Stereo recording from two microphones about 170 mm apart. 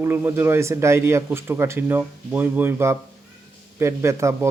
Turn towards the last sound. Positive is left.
turn(degrees=-15)  # may be behind; listen again after turning